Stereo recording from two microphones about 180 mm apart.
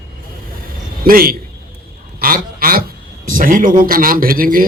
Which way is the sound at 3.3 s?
50° right (ahead or behind).